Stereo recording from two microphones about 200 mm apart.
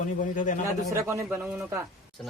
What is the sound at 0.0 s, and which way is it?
Speech, 40° left (ahead or behind).